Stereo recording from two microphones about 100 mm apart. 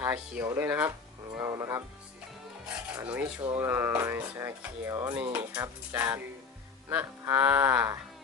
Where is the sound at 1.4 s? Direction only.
35° right (ahead or behind).